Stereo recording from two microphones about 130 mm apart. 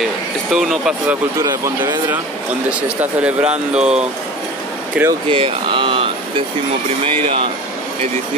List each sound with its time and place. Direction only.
0.5 s speech: centre (ahead or behind)
1.4 s speech: 20° right (ahead or behind)
5.3 s speech: 40° right (ahead or behind)